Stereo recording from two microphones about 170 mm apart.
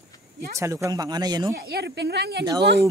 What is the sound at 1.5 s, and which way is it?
Speech, 75° right (ahead or behind).